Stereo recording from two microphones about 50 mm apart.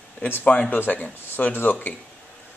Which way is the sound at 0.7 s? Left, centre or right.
Left.